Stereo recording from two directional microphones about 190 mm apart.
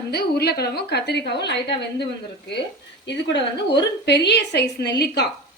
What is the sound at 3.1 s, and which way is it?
Speech, 65° left (ahead or behind).